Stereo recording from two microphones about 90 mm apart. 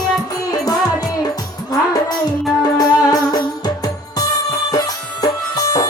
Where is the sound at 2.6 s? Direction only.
45° left (ahead or behind).